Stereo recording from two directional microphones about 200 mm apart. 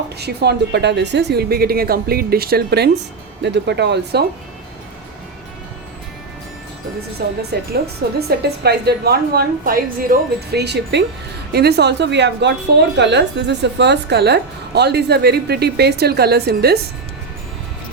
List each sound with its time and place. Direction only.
0.2 s a woman's voice: 55° right (ahead or behind)
7.2 s a woman's voice: 50° right (ahead or behind)